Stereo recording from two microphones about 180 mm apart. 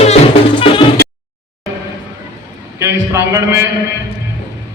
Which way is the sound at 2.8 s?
15° right (ahead or behind).